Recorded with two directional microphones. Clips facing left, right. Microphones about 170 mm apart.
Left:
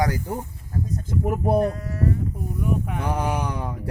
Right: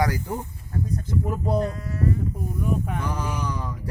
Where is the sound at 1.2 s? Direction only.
60° left (ahead or behind).